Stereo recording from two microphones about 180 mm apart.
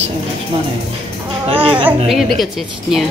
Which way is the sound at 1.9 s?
Centre (ahead or behind).